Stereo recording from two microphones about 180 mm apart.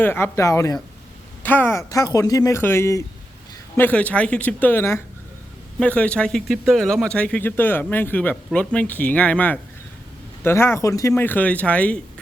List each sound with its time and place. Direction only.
0.0 s speech: 10° left (ahead or behind)